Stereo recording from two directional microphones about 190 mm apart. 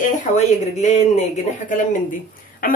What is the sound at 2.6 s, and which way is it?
Speech, 50° left (ahead or behind).